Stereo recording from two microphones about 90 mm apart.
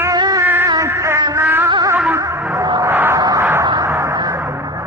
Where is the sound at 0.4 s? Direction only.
20° right (ahead or behind).